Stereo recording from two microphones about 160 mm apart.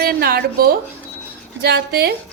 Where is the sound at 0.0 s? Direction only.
70° right (ahead or behind).